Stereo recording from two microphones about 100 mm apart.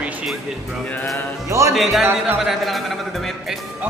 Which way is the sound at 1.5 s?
30° right (ahead or behind).